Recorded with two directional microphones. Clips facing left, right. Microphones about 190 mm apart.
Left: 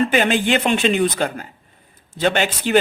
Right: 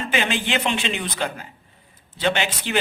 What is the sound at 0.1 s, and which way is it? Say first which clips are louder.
A man's voice: left 6 dB; 50° left (ahead or behind).